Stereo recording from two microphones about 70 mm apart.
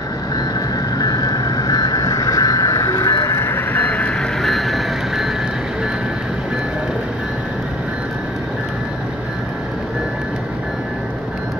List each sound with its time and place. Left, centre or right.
0.9 s vehicle: left
3.3 s vehicle: left; by 4.3 s centre
4.4 s a sound: centre